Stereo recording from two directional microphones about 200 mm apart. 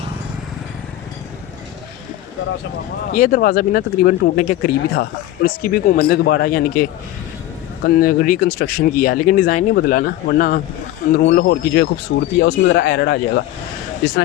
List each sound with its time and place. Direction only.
3.1 s speech: 45° left (ahead or behind)
7.9 s speech: 45° left (ahead or behind)